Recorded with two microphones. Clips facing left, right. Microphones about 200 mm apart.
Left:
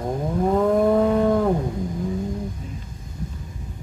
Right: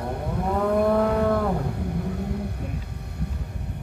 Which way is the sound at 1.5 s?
65° right (ahead or behind).